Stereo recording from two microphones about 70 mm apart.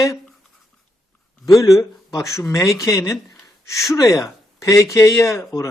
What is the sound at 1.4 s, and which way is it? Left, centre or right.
Speech, left.